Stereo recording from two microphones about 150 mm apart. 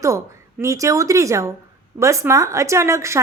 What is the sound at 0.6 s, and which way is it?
A woman's voice, 20° right (ahead or behind).